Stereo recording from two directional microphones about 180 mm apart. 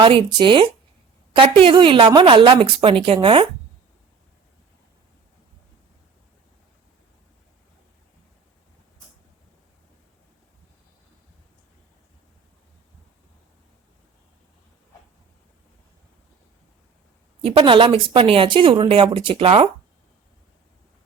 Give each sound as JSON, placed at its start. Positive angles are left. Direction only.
{"t": 0.0, "sound": "speech", "side_deg": -30}
{"t": 17.4, "sound": "speech", "side_deg": -30}